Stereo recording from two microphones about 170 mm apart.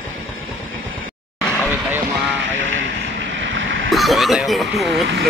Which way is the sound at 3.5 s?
90° right.